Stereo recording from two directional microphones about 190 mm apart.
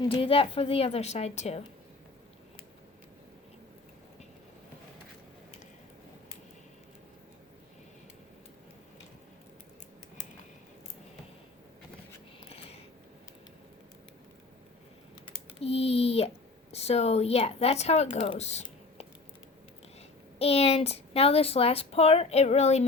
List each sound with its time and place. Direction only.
0.0 s a woman's voice: 30° left (ahead or behind)
12.4 s a sound: 30° left (ahead or behind)
15.6 s a woman's voice: 30° left (ahead or behind)
20.4 s a woman's voice: 30° left (ahead or behind)